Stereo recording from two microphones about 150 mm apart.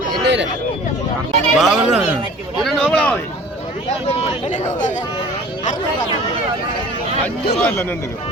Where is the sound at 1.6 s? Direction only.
5° right (ahead or behind).